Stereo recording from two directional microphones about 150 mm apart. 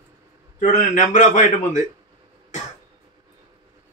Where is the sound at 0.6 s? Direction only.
55° left (ahead or behind).